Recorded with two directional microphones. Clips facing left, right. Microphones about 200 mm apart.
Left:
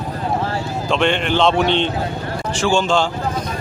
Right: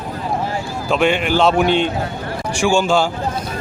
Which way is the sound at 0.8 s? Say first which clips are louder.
Right 2 dB; 5° right (ahead or behind).